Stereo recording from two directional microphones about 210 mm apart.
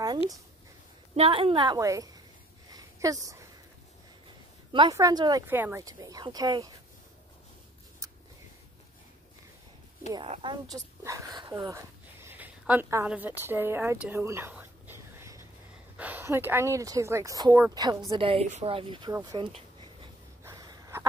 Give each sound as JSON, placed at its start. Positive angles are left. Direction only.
{"t": 1.1, "sound": "a woman's voice", "side_deg": -25}
{"t": 2.7, "sound": "a sound", "side_deg": -15}
{"t": 4.7, "sound": "speech", "side_deg": -20}
{"t": 10.1, "sound": "speech", "side_deg": -25}
{"t": 18.1, "sound": "a woman's voice", "side_deg": -25}
{"t": 19.1, "sound": "a sound", "side_deg": -20}